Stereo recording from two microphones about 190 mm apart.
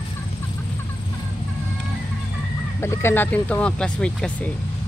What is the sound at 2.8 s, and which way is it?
Speech, 15° left (ahead or behind).